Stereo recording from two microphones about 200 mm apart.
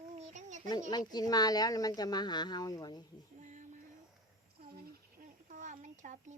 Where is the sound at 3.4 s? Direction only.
40° right (ahead or behind).